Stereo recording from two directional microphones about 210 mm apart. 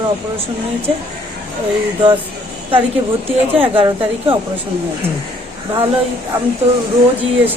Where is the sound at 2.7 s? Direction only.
25° right (ahead or behind).